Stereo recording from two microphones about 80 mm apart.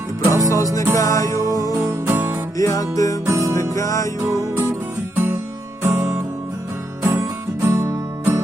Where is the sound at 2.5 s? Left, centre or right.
Left.